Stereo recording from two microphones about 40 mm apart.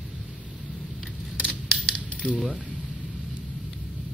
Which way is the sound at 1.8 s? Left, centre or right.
Left.